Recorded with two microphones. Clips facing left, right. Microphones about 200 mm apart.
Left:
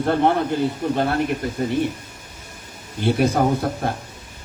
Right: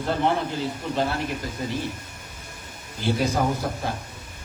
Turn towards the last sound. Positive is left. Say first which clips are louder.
# left 5 dB
turn(degrees=55)  # may be behind; listen again after turning